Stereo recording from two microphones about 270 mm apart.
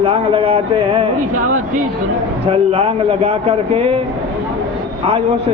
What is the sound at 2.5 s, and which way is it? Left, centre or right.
A man's voice, right.